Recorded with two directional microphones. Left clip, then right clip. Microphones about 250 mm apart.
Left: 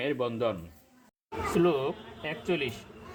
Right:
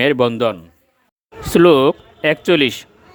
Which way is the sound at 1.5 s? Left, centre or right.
Right.